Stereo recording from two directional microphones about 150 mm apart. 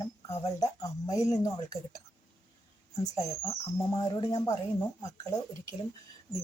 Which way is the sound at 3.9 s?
25° left (ahead or behind).